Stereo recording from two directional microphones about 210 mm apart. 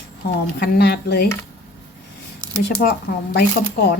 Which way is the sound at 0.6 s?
50° left (ahead or behind).